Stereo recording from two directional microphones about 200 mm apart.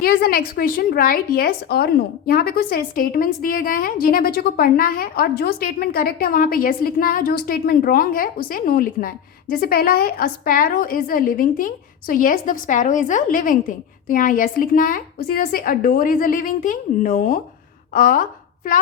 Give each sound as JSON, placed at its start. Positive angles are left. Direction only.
{"t": 0.0, "sound": "a woman's voice", "side_deg": 50}